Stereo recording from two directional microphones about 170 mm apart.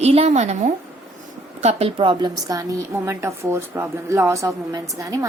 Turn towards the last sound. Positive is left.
turn(degrees=-20)  # may be behind; listen again after turning